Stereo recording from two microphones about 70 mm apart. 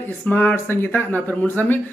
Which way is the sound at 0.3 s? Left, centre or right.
Left.